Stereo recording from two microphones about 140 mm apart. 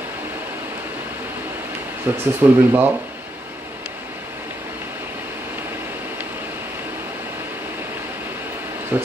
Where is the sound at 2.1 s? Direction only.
15° right (ahead or behind).